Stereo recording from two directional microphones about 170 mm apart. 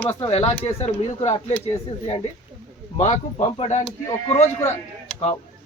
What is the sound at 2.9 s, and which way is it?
Speech, 40° left (ahead or behind).